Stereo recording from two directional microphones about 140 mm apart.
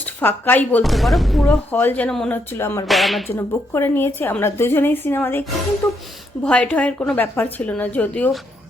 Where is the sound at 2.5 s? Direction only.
20° left (ahead or behind).